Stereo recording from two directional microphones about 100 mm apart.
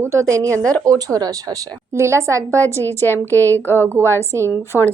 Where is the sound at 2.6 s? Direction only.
20° left (ahead or behind).